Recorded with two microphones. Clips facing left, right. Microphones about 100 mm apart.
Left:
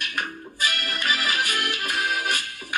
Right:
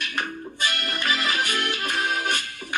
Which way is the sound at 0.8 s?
30° right (ahead or behind).